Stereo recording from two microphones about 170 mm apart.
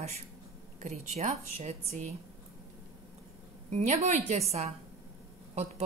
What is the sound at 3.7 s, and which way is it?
Speech, 40° right (ahead or behind).